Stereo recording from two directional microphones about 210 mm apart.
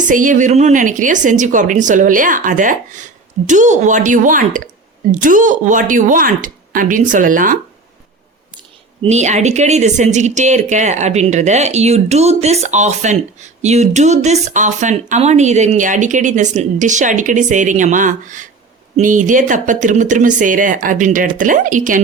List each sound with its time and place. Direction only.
0.1 s speech: 40° right (ahead or behind)
9.0 s speech: 35° right (ahead or behind)